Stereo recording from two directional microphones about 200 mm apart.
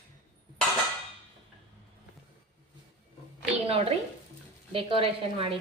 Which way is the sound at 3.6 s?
30° right (ahead or behind).